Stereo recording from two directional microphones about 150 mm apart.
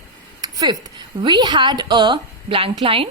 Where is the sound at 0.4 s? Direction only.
25° right (ahead or behind).